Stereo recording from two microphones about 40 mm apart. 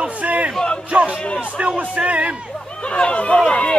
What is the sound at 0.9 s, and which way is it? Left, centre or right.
Music, right.